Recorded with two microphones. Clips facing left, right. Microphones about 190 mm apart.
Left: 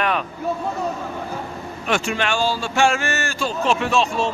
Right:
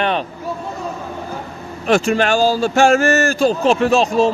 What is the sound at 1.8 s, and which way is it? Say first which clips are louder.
A man's voice: right 8 dB; 40° right (ahead or behind).